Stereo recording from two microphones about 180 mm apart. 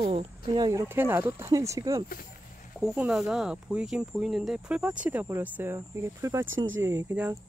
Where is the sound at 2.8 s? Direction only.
5° right (ahead or behind).